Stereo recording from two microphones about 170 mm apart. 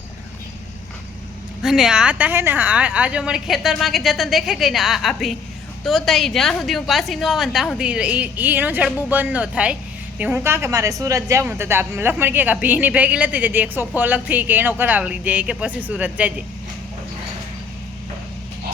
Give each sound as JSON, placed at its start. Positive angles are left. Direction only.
{"t": 1.6, "sound": "a woman's voice", "side_deg": 0}